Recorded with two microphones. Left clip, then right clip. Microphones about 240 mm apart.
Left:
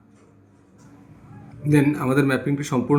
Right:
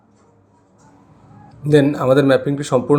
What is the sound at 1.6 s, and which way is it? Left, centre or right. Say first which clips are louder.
Speech: right 6 dB; centre.